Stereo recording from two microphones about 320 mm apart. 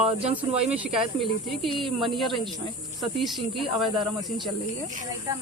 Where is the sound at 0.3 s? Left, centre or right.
Centre.